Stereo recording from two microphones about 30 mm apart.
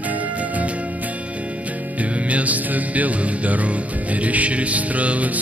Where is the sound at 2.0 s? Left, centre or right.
Right.